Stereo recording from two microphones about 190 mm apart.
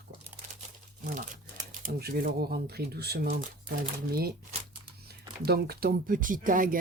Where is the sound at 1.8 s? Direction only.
55° right (ahead or behind).